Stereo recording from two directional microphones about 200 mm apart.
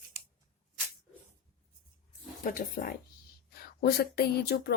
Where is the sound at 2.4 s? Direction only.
45° left (ahead or behind).